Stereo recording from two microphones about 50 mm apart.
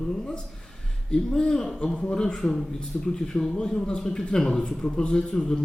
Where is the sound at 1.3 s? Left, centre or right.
Centre.